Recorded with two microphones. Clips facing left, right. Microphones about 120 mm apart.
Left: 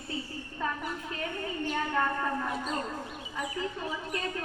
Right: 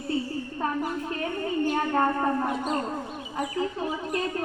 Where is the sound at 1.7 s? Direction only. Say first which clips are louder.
Right 3 dB; 45° right (ahead or behind).